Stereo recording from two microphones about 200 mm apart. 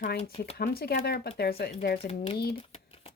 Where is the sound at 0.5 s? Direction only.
50° left (ahead or behind).